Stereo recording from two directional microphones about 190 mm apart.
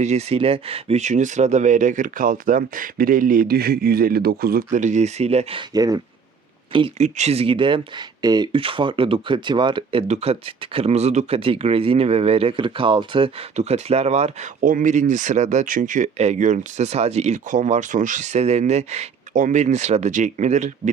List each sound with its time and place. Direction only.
0.0 s speech: 35° right (ahead or behind); by 6.0 s 20° right (ahead or behind)
6.7 s speech: 30° right (ahead or behind)